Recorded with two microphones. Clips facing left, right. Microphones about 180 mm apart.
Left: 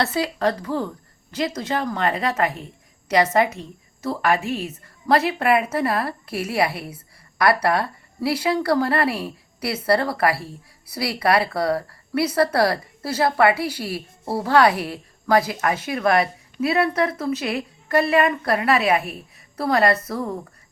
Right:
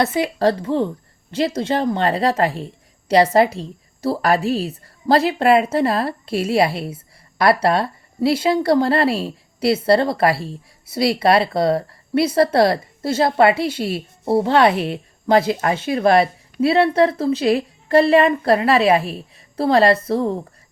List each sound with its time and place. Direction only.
0.0 s a woman's voice: 20° right (ahead or behind)